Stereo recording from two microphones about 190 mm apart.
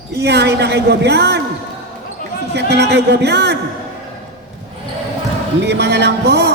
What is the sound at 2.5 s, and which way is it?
A woman's voice, 60° right (ahead or behind).